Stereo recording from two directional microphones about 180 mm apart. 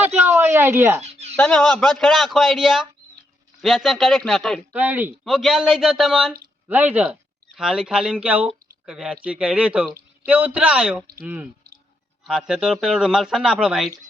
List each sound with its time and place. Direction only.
0.3 s speech: 10° right (ahead or behind)
1.0 s a sound: 40° right (ahead or behind)
1.4 s speech: 5° left (ahead or behind)
4.8 s speech: 10° right (ahead or behind)